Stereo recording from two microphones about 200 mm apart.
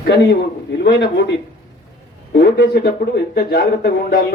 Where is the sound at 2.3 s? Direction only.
50° left (ahead or behind).